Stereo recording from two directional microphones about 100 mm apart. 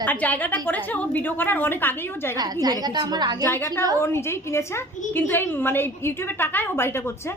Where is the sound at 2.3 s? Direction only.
40° right (ahead or behind).